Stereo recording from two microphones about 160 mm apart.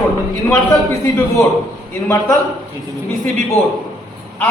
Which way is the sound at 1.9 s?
15° left (ahead or behind).